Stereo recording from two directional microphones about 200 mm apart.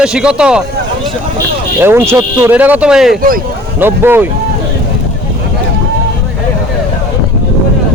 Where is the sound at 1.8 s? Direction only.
10° right (ahead or behind).